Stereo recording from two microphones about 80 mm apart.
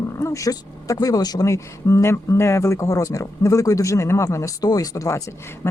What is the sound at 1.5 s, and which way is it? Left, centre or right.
A woman's voice, left.